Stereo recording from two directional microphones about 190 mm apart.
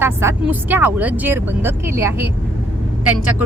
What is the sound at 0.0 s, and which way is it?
Speech, 15° right (ahead or behind).